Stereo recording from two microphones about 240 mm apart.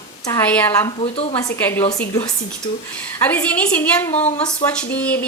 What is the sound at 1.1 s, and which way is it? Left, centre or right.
Speech, left.